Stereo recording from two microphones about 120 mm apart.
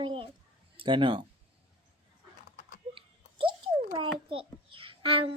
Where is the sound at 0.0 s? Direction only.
45° right (ahead or behind).